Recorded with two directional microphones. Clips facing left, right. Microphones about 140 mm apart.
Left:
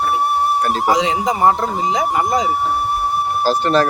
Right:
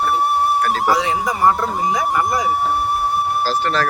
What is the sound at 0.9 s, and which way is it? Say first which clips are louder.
Speech: left 2 dB; 20° left (ahead or behind).